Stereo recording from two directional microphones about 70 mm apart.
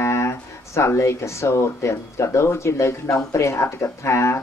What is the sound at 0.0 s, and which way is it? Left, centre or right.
Speech, left.